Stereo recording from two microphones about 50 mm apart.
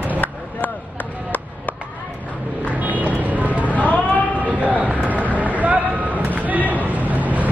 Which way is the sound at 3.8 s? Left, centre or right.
Left.